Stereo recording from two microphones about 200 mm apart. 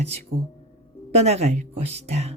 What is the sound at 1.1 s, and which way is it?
Speech, 30° right (ahead or behind).